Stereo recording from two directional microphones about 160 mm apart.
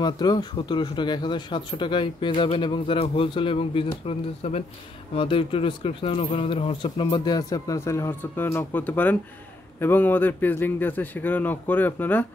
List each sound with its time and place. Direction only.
0.0 s a man's voice: 25° left (ahead or behind)